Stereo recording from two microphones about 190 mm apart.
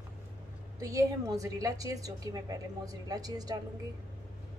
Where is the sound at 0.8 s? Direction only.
15° right (ahead or behind).